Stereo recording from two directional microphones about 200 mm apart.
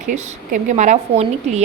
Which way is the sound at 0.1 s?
35° right (ahead or behind).